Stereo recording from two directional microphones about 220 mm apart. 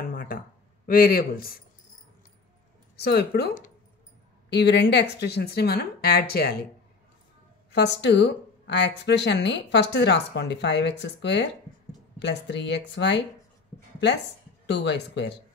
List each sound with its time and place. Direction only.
0.1 s a sound: 40° left (ahead or behind)
0.8 s speech: 40° left (ahead or behind)
3.0 s speech: 50° left (ahead or behind)
7.7 s speech: 50° left (ahead or behind)
14.7 s speech: 50° left (ahead or behind)